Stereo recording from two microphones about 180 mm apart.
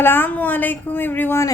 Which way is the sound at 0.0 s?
10° left (ahead or behind).